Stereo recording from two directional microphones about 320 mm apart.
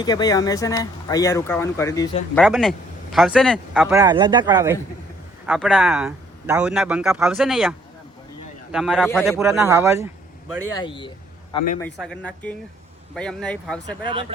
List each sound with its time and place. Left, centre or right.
0.0 s speech: centre
2.4 s speech: centre
10.8 s a man's voice: centre
11.8 s speech: centre
14.0 s speech: centre